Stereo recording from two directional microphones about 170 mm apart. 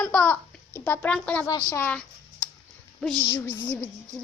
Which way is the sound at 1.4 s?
20° left (ahead or behind).